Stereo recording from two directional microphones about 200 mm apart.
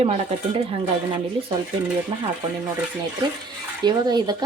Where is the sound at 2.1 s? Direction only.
25° right (ahead or behind).